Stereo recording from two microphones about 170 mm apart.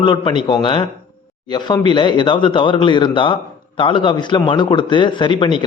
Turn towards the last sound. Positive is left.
turn(degrees=30)  # may be behind; listen again after turning